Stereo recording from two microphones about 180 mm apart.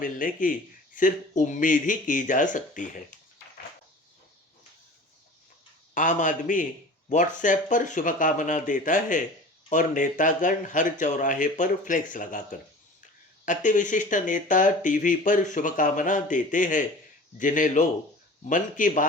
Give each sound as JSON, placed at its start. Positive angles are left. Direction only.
{"t": 0.0, "sound": "speech", "side_deg": 50}
{"t": 5.9, "sound": "speech", "side_deg": 45}